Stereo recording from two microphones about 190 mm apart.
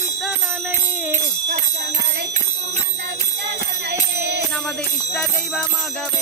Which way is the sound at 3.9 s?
60° right (ahead or behind).